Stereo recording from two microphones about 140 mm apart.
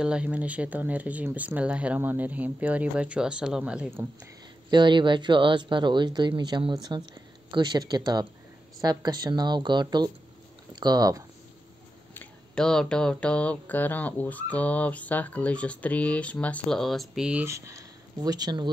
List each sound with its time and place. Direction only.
0.0 s speech: 5° right (ahead or behind)
4.6 s speech: 35° right (ahead or behind)
12.1 s a sound: 15° left (ahead or behind)
12.6 s speech: 5° left (ahead or behind)
17.5 s speech: 20° right (ahead or behind)